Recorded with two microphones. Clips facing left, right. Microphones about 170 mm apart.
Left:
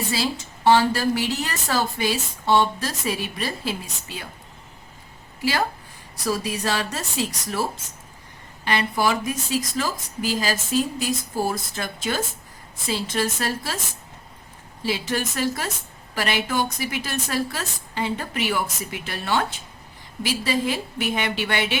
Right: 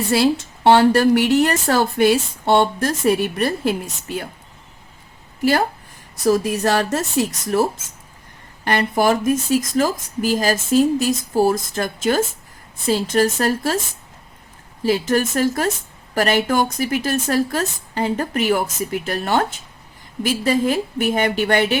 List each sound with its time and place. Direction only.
0.1 s a woman's voice: 65° right (ahead or behind)
5.4 s a woman's voice: 55° right (ahead or behind)
14.8 s speech: 45° right (ahead or behind)